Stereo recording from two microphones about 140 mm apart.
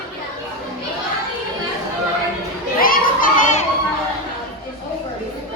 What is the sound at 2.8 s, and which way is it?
Children playing, 85° left.